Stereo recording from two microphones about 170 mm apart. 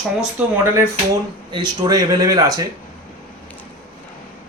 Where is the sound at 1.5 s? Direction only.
25° right (ahead or behind).